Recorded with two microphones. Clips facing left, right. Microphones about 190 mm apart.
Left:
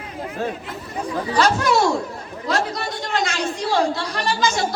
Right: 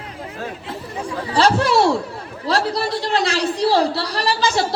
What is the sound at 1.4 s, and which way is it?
A woman's voice, 30° right (ahead or behind).